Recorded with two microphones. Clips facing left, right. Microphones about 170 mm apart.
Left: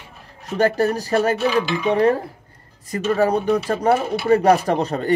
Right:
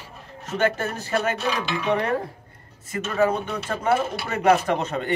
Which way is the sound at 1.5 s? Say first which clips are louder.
Left 6 dB; centre (ahead or behind).